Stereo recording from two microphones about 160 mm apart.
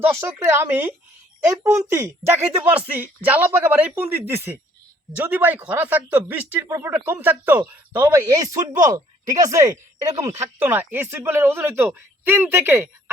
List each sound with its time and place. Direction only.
0.0 s speech: 15° right (ahead or behind)
10.6 s speech: 10° right (ahead or behind)